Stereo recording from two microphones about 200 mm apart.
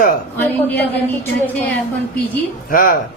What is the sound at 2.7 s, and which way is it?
Speech, 45° left (ahead or behind).